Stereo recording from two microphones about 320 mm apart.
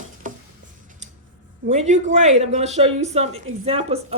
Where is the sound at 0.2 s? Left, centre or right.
Right.